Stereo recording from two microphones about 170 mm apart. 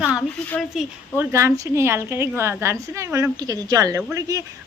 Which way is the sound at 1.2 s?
15° right (ahead or behind).